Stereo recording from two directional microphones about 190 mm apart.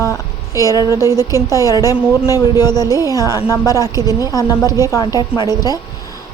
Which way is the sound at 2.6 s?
20° left (ahead or behind).